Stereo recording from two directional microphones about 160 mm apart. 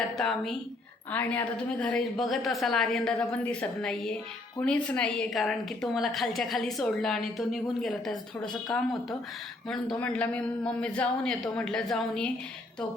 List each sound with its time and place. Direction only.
0.2 s a woman's voice: centre (ahead or behind)